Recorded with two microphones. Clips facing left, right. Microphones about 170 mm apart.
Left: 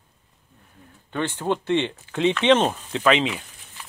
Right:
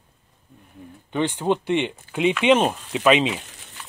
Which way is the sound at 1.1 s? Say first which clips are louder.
Right 3 dB; 15° right (ahead or behind).